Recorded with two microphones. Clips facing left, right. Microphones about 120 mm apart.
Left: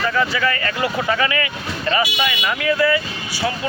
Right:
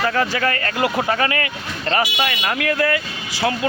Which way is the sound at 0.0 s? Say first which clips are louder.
Even; 50° right (ahead or behind).